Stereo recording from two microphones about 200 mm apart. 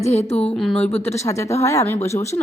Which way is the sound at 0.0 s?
35° left (ahead or behind).